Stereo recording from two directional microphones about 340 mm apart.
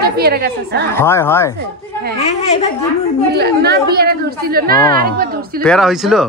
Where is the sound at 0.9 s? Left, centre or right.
Centre.